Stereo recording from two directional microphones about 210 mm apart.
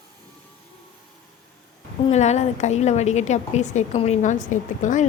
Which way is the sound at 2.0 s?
30° left (ahead or behind).